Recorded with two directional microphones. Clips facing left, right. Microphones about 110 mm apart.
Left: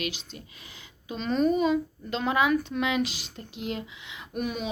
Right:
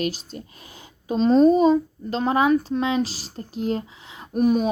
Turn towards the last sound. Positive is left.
turn(degrees=-40)  # may be behind; listen again after turning